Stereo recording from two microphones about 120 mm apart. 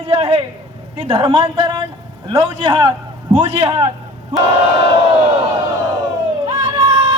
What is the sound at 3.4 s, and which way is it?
Speech, 55° right (ahead or behind).